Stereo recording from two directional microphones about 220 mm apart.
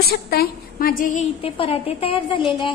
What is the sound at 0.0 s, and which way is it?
A woman's voice, 45° left (ahead or behind).